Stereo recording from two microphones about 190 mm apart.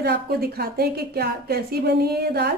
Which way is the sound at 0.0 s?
55° right (ahead or behind).